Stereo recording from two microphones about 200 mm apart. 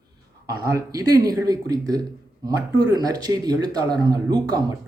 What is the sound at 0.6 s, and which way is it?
Speech, 15° right (ahead or behind).